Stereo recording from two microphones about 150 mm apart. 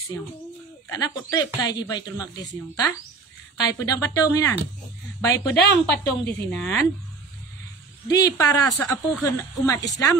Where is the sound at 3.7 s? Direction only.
25° left (ahead or behind).